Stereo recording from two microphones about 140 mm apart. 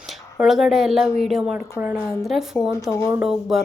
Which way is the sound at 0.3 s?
5° right (ahead or behind).